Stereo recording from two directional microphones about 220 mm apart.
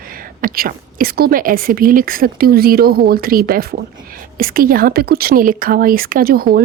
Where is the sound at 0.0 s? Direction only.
40° right (ahead or behind).